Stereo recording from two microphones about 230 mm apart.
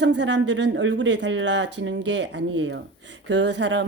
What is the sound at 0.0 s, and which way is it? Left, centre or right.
Speech, right.